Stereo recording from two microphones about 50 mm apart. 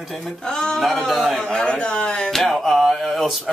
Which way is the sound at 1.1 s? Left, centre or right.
Centre.